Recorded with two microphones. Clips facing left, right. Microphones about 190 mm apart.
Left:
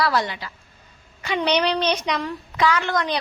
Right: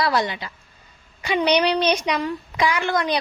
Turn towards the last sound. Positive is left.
turn(degrees=-10)  # may be behind; listen again after turning